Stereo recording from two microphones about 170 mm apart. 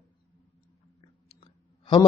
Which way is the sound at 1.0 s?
30° left (ahead or behind).